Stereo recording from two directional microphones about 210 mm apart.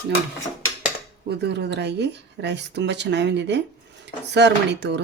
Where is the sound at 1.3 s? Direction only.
55° right (ahead or behind).